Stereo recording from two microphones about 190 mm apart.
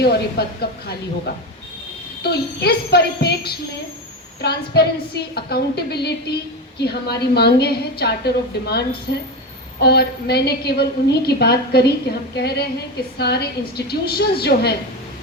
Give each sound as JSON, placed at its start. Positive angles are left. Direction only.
{"t": 0.0, "sound": "a woman's voice", "side_deg": 60}
{"t": 2.2, "sound": "a woman's voice", "side_deg": 60}
{"t": 9.8, "sound": "a woman's voice", "side_deg": 60}